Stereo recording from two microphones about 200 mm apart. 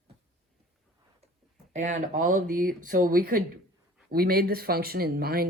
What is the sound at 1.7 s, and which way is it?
Speech, 35° right (ahead or behind).